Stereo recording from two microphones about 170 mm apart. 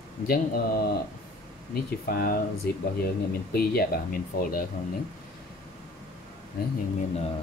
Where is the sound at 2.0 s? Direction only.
60° left (ahead or behind).